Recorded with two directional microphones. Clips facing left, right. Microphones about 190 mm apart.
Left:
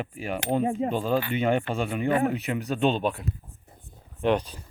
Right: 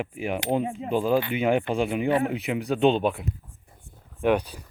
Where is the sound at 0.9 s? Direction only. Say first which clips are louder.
Right 3 dB; 15° right (ahead or behind).